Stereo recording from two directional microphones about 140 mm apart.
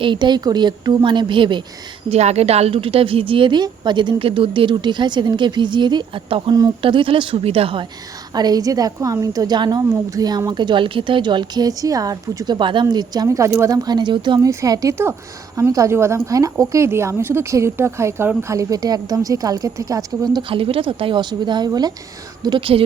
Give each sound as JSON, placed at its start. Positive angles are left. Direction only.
{"t": 0.0, "sound": "a woman's voice", "side_deg": -35}
{"t": 2.0, "sound": "a woman's voice", "side_deg": -50}
{"t": 8.3, "sound": "a woman's voice", "side_deg": -30}
{"t": 20.5, "sound": "a woman's voice", "side_deg": -40}